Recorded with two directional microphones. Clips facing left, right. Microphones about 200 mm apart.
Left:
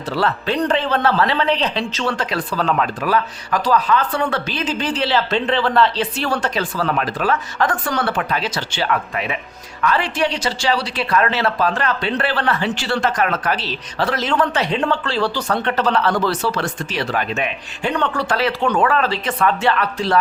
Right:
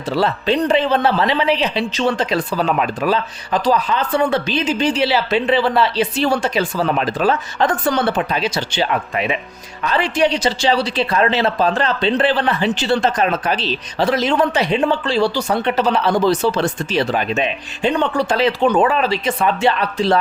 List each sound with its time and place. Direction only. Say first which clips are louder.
0.2 s a woman's voice: right 2 dB; 15° right (ahead or behind)